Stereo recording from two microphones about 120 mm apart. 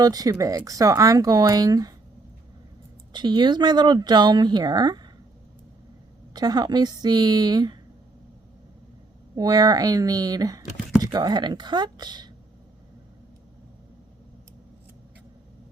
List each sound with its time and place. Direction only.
0.0 s speech: 30° right (ahead or behind)
3.1 s speech: 40° right (ahead or behind)
6.3 s speech: 35° right (ahead or behind)
9.3 s speech: 35° right (ahead or behind)